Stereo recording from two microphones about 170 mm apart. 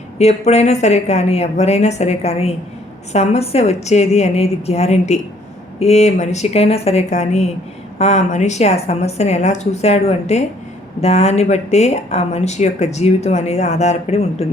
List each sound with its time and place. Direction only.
0.2 s speech: 40° left (ahead or behind)